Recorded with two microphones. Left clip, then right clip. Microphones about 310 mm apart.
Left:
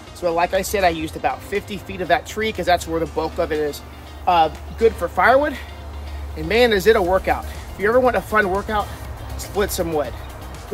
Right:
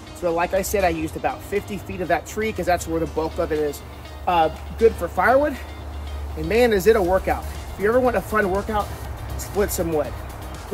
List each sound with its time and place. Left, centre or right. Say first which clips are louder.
0.2 s speech: left 2 dB; centre
6.5 s speech: left 2 dB; centre